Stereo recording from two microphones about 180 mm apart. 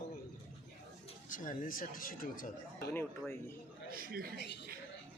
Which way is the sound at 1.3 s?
50° left (ahead or behind).